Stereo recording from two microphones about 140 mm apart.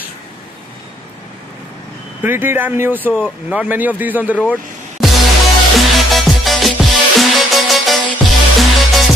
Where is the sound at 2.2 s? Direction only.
15° right (ahead or behind).